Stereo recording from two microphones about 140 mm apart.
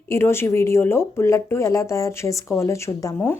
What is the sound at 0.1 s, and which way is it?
Speech, 15° left (ahead or behind).